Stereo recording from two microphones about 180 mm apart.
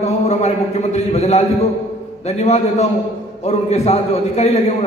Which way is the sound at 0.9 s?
40° left (ahead or behind).